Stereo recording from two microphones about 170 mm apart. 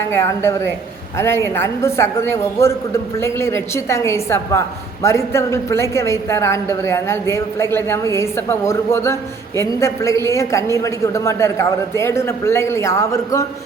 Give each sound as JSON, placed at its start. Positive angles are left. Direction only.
{"t": 0.1, "sound": "a woman's voice", "side_deg": 15}